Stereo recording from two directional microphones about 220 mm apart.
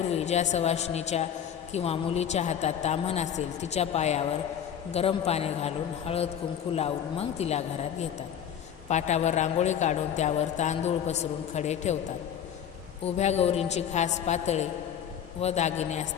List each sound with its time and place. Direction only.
0.1 s a woman's voice: 30° left (ahead or behind)
13.1 s a woman's voice: 30° left (ahead or behind)